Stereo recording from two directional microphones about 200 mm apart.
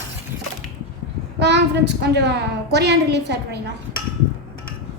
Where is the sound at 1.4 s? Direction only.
60° right (ahead or behind).